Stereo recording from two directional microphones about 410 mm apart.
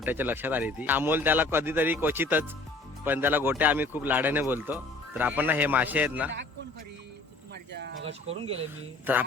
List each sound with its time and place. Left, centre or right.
0.0 s speech: centre
7.5 s a sound: right
8.0 s speech: centre